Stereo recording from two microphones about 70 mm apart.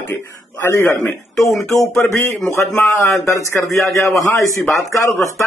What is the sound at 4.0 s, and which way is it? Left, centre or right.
Speech, left.